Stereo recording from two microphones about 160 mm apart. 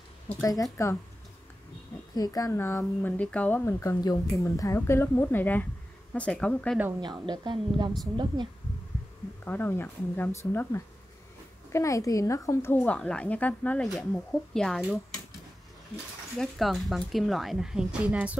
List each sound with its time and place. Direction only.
0.4 s speech: 20° left (ahead or behind)
2.1 s speech: 25° left (ahead or behind); by 6.8 s 5° left (ahead or behind)
7.0 s a woman's voice: 30° right (ahead or behind)
9.4 s speech: 10° left (ahead or behind)
16.3 s a woman's voice: centre (ahead or behind)